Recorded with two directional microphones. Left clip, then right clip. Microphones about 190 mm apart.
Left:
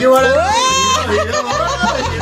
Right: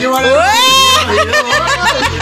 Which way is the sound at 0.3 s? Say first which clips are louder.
Right 4 dB; centre (ahead or behind).